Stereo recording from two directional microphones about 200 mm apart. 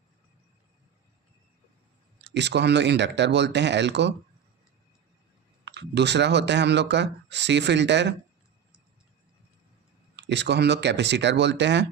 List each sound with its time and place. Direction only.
2.2 s speech: 60° right (ahead or behind)
5.6 s speech: 60° right (ahead or behind)
10.2 s speech: 60° right (ahead or behind)